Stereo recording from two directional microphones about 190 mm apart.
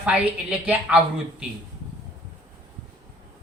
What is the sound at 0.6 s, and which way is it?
Speech, 10° right (ahead or behind).